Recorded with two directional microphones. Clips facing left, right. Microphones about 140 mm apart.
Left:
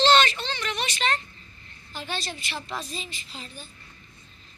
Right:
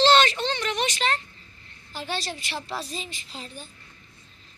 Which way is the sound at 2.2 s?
40° right (ahead or behind).